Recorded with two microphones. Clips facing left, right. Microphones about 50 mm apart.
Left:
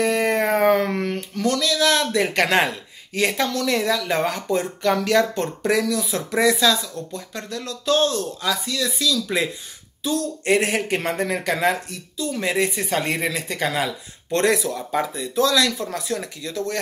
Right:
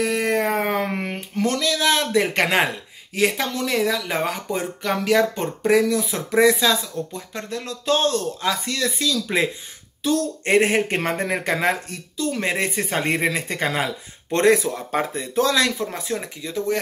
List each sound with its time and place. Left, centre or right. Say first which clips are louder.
0.0 s a sound: left 1 dB; centre
3.2 s speech: even; centre; by 9.5 s right
10.0 s speech: even; right
12.2 s speech: left 1 dB; right; by 16.7 s centre